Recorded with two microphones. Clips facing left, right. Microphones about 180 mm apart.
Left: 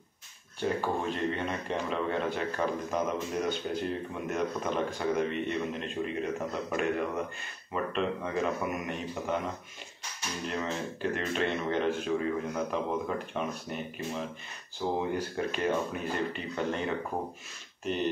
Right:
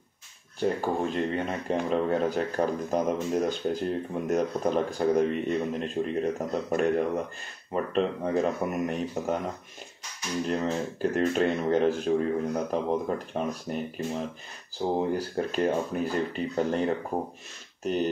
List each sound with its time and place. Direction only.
0.6 s speech: 40° right (ahead or behind)
10.4 s speech: 40° right (ahead or behind)
14.8 s speech: 40° right (ahead or behind)